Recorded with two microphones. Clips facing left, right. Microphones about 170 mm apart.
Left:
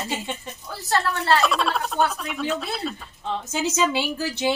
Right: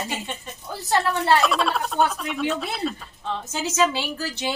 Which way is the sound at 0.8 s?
15° right (ahead or behind).